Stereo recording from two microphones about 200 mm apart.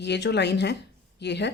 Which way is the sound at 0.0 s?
60° left (ahead or behind).